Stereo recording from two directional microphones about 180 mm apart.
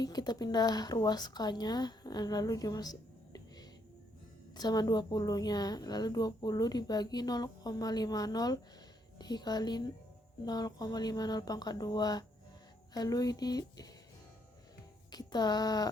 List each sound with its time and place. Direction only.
0.0 s a woman's voice: 20° left (ahead or behind)
15.1 s a woman's voice: 20° left (ahead or behind)